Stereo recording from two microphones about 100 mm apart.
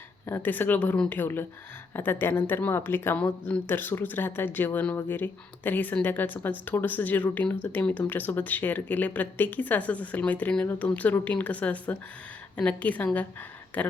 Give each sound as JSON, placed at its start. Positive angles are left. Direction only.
{"t": 0.3, "sound": "speech", "side_deg": 20}